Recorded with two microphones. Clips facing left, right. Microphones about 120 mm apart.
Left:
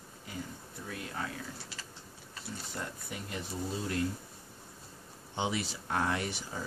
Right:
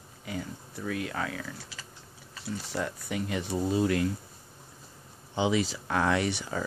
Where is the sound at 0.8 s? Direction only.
90° right.